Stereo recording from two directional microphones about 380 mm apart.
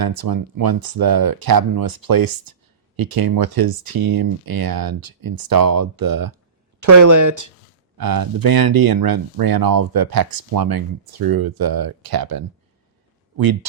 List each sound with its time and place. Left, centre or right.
0.0 s speech: right
6.7 s speech: right
7.9 s speech: right